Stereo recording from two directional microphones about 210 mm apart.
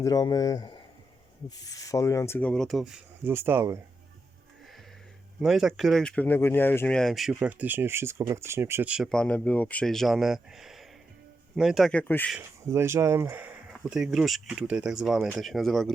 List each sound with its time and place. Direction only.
0.0 s speech: 15° left (ahead or behind); by 3.8 s 10° right (ahead or behind)
5.4 s speech: centre (ahead or behind)
12.4 s speech: 10° right (ahead or behind)